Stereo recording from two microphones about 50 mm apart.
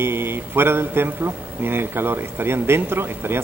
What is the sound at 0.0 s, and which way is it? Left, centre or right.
A man's voice, right.